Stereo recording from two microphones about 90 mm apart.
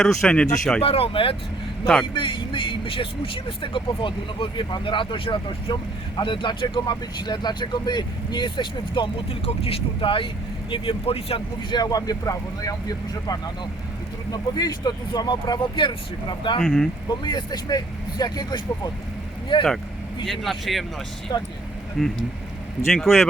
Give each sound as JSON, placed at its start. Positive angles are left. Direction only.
{"t": 0.0, "sound": "speech", "side_deg": 5}
{"t": 0.8, "sound": "speech", "side_deg": 90}
{"t": 2.1, "sound": "speech", "side_deg": 65}
{"t": 6.1, "sound": "speech", "side_deg": 60}
{"t": 11.7, "sound": "speech", "side_deg": 50}
{"t": 15.7, "sound": "speech", "side_deg": 65}
{"t": 16.6, "sound": "speech", "side_deg": 5}
{"t": 17.1, "sound": "speech", "side_deg": 50}
{"t": 19.5, "sound": "speech", "side_deg": 65}
{"t": 20.2, "sound": "speech", "side_deg": 0}
{"t": 21.3, "sound": "speech", "side_deg": 50}
{"t": 22.0, "sound": "speech", "side_deg": 5}